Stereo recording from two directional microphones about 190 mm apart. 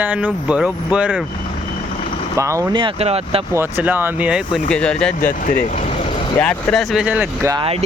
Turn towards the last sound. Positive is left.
turn(degrees=-25)  # may be behind; listen again after turning